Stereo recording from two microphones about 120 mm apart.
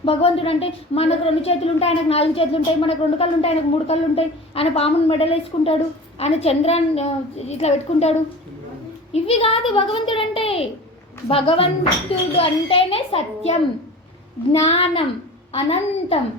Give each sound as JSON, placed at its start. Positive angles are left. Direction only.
{"t": 0.0, "sound": "speech", "side_deg": 55}
{"t": 9.1, "sound": "a child's voice", "side_deg": 55}
{"t": 14.6, "sound": "speech", "side_deg": 55}